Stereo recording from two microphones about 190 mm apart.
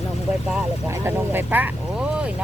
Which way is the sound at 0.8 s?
15° right (ahead or behind).